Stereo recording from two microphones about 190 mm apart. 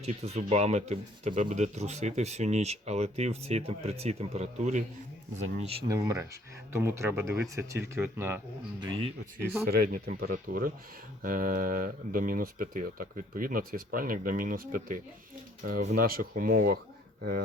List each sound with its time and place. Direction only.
0.0 s speech: 35° right (ahead or behind)
5.9 s speech: 15° right (ahead or behind)
9.6 s speech: 55° right (ahead or behind)